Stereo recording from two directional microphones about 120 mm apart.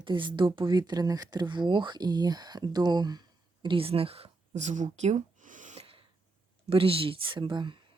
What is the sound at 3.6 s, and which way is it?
Speech, 45° right (ahead or behind).